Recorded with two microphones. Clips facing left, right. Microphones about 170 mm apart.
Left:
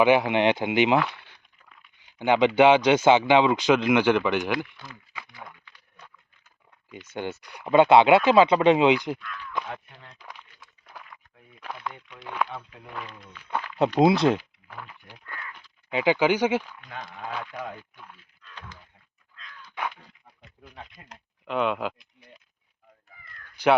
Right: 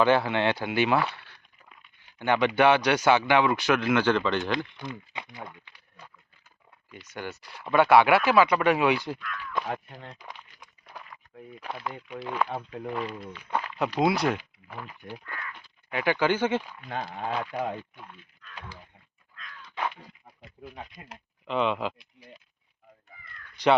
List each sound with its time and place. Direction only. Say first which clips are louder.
0.0 s speech: left 3 dB; 15° left (ahead or behind)
1.1 s a sound: even; 15° left (ahead or behind)
2.1 s speech: left 4 dB; 15° left (ahead or behind)
4.5 s speech: even; 20° right (ahead or behind)
7.1 s speech: left 5 dB; 20° left (ahead or behind)
9.6 s speech: right 4 dB; 35° right (ahead or behind)
11.8 s speech: right 3 dB; 5° right (ahead or behind)
12.5 s speech: right 6 dB; 35° right (ahead or behind)
14.0 s speech: left 5 dB; 20° left (ahead or behind)
15.9 s speech: left 3 dB; 15° left (ahead or behind)
16.9 s speech: right 4 dB; 35° right (ahead or behind)
19.6 s dog: right 1 dB; 5° left (ahead or behind)
19.9 s speech: right 3 dB; 10° right (ahead or behind)
21.4 s speech: left 1 dB; centre (ahead or behind)